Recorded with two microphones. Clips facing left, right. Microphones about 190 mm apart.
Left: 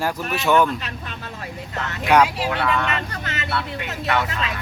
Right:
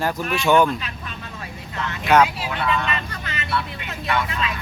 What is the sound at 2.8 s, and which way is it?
Speech, 60° left (ahead or behind).